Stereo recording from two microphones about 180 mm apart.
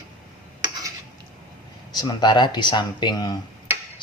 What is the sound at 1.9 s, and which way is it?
Speech, 25° left (ahead or behind).